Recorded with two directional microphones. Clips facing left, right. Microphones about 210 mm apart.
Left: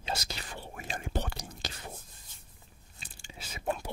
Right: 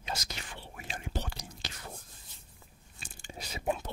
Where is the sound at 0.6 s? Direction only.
45° left (ahead or behind).